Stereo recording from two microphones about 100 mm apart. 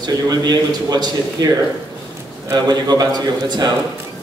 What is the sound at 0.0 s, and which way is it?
A man's voice, 40° right (ahead or behind).